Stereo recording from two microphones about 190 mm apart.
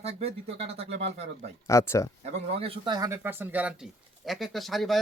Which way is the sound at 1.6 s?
15° left (ahead or behind).